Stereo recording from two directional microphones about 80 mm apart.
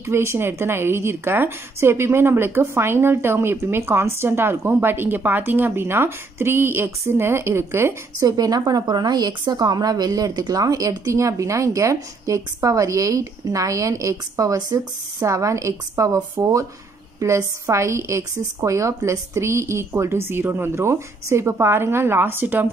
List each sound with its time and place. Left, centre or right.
0.0 s a woman's voice: right
8.2 s a woman's voice: right